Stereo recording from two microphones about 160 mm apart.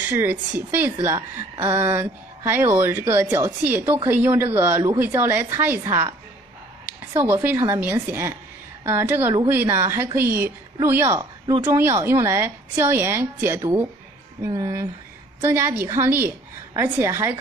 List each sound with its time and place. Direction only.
0.1 s a woman's voice: 15° right (ahead or behind)
7.2 s a woman's voice: 10° right (ahead or behind)